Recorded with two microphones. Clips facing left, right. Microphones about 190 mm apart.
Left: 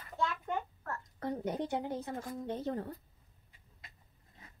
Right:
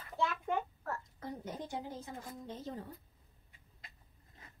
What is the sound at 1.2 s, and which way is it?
A woman's voice, 65° left (ahead or behind).